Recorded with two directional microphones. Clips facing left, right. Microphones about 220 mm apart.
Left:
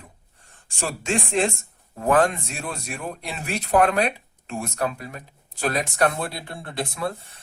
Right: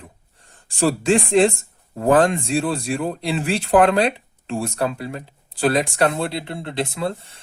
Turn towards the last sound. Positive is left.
turn(degrees=-25)  # may be behind; listen again after turning